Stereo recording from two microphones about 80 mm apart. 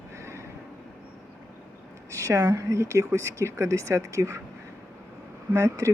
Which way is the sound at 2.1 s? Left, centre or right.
Right.